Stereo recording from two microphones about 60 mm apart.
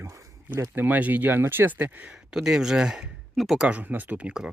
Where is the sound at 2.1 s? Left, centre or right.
Centre.